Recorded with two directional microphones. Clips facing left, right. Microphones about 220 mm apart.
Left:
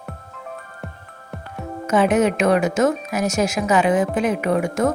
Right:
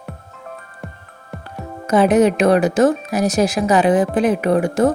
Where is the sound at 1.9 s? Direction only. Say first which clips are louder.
Right 4 dB; 35° right (ahead or behind).